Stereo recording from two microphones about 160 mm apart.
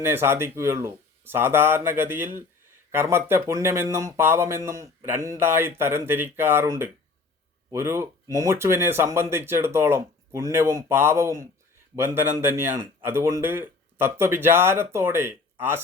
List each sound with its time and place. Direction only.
0.0 s speech: 15° right (ahead or behind)